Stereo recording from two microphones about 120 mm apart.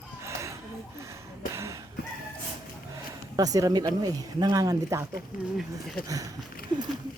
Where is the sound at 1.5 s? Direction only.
25° right (ahead or behind).